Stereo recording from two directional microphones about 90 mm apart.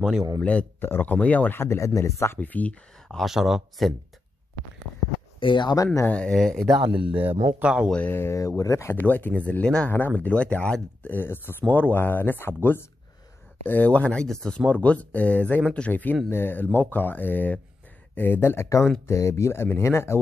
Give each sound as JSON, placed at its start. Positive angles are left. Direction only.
{"t": 0.4, "sound": "speech", "side_deg": 15}
{"t": 2.3, "sound": "speech", "side_deg": 15}
{"t": 3.1, "sound": "speech", "side_deg": 0}
{"t": 5.4, "sound": "speech", "side_deg": 60}
{"t": 6.0, "sound": "speech", "side_deg": 15}
{"t": 6.3, "sound": "speech", "side_deg": 0}
{"t": 6.9, "sound": "speech", "side_deg": -15}
{"t": 8.1, "sound": "speech", "side_deg": 30}
{"t": 8.9, "sound": "speech", "side_deg": 20}
{"t": 13.7, "sound": "speech", "side_deg": 15}